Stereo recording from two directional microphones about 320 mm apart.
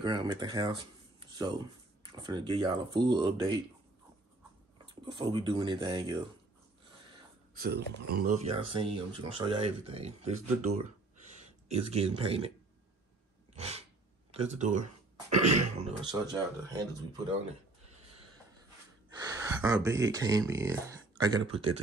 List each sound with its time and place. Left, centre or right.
0.0 s speech: centre
2.1 s speech: centre
4.8 s speech: centre
7.5 s speech: right
13.6 s a sound: centre
14.3 s speech: centre
19.0 s speech: centre